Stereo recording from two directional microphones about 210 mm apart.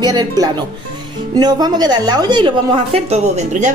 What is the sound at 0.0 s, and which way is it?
A woman's voice, 20° right (ahead or behind).